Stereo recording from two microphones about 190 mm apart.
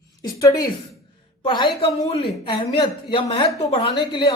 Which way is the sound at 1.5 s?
25° left (ahead or behind).